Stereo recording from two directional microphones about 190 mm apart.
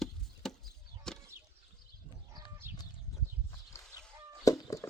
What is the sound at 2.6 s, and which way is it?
Chicken, 10° right (ahead or behind).